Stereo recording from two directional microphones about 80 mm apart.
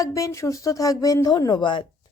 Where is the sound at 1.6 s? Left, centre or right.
Left.